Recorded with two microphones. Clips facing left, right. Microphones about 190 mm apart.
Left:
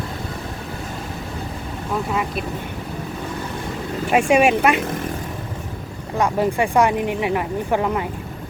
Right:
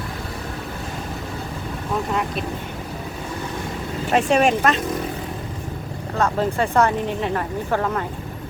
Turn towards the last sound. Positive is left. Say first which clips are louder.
# left 2 dB
turn(degrees=15)  # may be behind; listen again after turning